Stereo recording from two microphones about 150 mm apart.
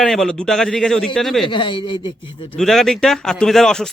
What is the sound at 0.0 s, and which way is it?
Speech, 5° left (ahead or behind).